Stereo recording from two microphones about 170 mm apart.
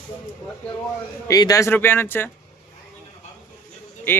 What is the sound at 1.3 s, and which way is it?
Speech, 20° left (ahead or behind).